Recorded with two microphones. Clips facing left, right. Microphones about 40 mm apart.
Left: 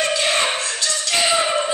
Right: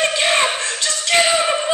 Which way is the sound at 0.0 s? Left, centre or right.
Right.